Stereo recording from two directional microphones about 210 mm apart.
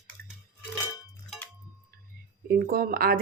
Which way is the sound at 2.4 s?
45° right (ahead or behind).